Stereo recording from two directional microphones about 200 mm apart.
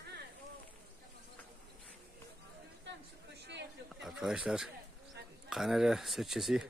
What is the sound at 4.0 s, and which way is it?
Speech, centre (ahead or behind).